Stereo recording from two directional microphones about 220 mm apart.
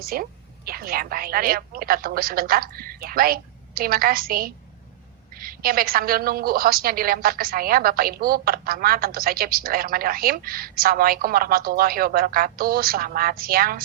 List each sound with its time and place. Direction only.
0.0 s a woman's voice: 40° right (ahead or behind)